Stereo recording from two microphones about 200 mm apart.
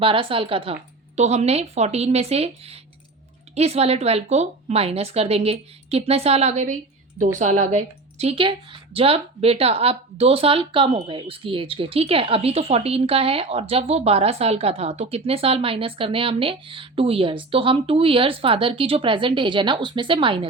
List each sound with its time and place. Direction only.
0.0 s a woman's voice: 25° right (ahead or behind)